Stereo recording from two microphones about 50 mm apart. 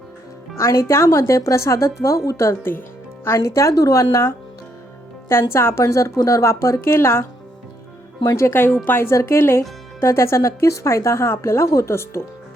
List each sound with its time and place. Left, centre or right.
0.5 s a woman's voice: left
2.0 s speech: left
5.3 s a woman's voice: left
9.0 s speech: left